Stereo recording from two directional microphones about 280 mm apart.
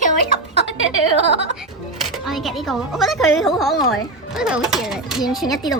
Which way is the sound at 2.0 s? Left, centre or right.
Centre.